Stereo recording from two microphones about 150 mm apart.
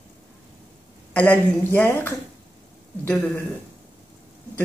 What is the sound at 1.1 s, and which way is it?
Speech, 10° left (ahead or behind).